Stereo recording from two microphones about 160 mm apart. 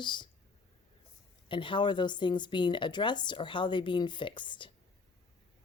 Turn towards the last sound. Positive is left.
turn(degrees=30)  # may be behind; listen again after turning